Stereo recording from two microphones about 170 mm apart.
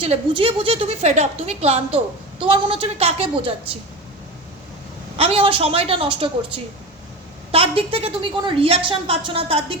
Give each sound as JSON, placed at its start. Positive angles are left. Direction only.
{"t": 0.0, "sound": "a woman's voice", "side_deg": -35}
{"t": 5.1, "sound": "a woman's voice", "side_deg": -35}